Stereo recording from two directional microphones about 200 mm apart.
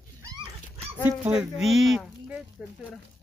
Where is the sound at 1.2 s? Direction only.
5° right (ahead or behind).